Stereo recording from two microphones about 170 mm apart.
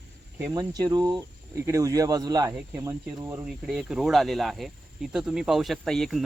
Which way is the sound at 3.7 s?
5° right (ahead or behind).